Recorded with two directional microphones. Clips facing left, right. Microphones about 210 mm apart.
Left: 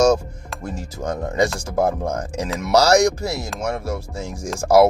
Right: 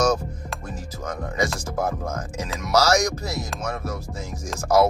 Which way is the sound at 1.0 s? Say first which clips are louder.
Left 6 dB; 25° left (ahead or behind).